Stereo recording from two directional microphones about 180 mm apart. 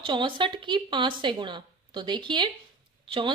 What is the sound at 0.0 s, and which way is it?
Speech, 25° right (ahead or behind).